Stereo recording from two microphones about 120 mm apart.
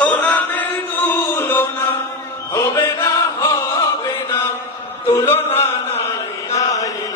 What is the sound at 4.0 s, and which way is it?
Chant, 30° left (ahead or behind).